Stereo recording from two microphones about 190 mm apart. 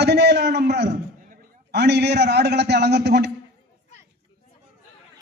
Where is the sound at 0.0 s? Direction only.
60° right (ahead or behind).